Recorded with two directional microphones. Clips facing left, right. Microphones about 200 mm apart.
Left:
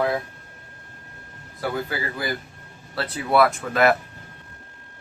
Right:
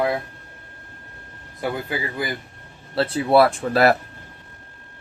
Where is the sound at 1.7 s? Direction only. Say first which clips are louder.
Right 1 dB; 20° right (ahead or behind); by 3.9 s 35° right (ahead or behind).